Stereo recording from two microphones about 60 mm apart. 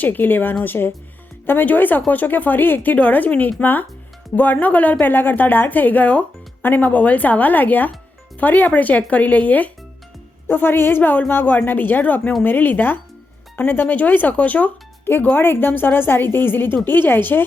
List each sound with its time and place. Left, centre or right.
0.0 s speech: left